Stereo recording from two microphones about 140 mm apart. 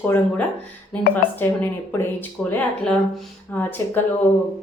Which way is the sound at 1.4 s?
15° left (ahead or behind).